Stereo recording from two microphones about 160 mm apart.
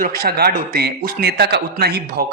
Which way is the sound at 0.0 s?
65° right (ahead or behind).